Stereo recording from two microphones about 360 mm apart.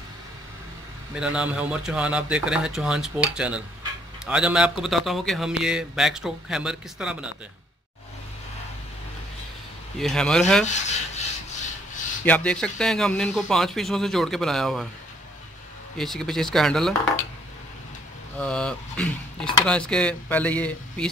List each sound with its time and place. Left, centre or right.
1.1 s speech: centre
9.9 s speech: centre
10.6 s rub: centre
12.3 s speech: centre
16.0 s speech: centre
18.4 s speech: centre